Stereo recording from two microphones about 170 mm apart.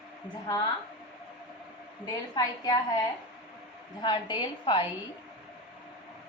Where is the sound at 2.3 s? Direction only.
25° left (ahead or behind).